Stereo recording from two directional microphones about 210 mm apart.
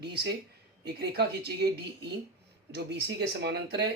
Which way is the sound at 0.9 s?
50° right (ahead or behind).